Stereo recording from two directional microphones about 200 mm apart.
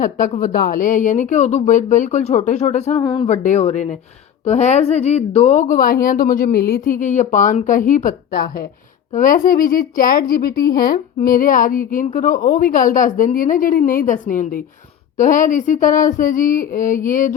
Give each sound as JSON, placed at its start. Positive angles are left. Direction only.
{"t": 0.0, "sound": "a woman's voice", "side_deg": 40}
{"t": 3.0, "sound": "speech", "side_deg": 25}
{"t": 3.2, "sound": "a woman's voice", "side_deg": 35}